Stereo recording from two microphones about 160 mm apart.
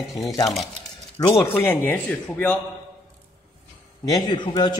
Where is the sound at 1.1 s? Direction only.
20° left (ahead or behind).